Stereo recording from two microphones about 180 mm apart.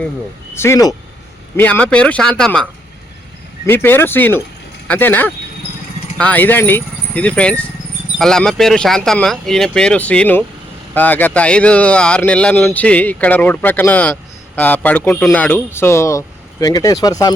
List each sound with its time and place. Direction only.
0.5 s speech: 15° left (ahead or behind)
3.7 s speech: 10° left (ahead or behind)